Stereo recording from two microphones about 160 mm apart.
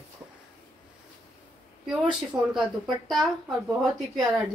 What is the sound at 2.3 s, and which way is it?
A woman's voice, 10° right (ahead or behind).